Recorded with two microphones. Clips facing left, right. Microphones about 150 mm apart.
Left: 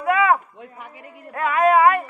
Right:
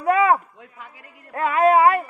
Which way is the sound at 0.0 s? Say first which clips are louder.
Right 1 dB; 35° right (ahead or behind).